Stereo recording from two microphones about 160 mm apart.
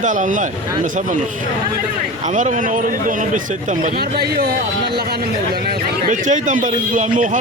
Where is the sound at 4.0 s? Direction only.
75° right (ahead or behind).